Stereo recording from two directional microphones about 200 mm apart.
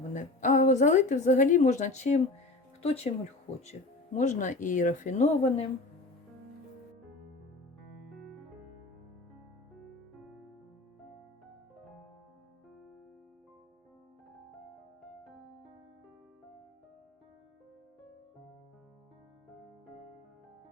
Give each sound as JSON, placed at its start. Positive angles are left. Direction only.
{"t": 0.1, "sound": "a woman's voice", "side_deg": 40}
{"t": 8.1, "sound": "music", "side_deg": 0}
{"t": 9.9, "sound": "music", "side_deg": 0}
{"t": 15.0, "sound": "music", "side_deg": 0}